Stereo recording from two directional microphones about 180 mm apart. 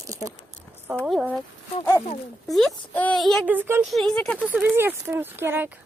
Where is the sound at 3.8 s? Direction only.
Centre (ahead or behind).